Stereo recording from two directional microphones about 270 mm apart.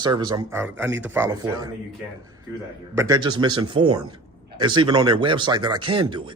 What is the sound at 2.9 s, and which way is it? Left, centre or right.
Speech, centre.